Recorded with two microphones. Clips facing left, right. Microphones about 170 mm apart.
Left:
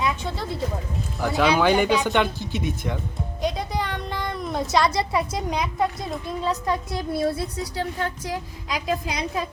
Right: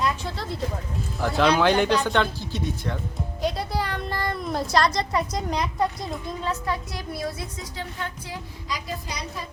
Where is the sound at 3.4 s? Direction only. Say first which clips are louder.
Even; 5° right (ahead or behind).